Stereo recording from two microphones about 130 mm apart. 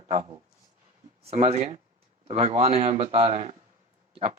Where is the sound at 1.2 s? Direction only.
50° right (ahead or behind).